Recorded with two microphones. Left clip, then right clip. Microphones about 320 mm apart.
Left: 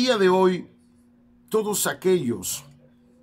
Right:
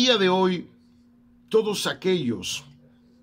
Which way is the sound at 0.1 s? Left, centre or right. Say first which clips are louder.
Left 5 dB; centre.